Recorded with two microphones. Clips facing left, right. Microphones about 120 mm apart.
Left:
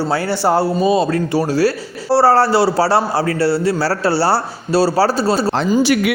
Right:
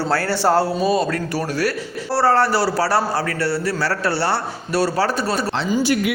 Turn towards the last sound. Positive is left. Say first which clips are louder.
# left 4 dB
turn(degrees=90)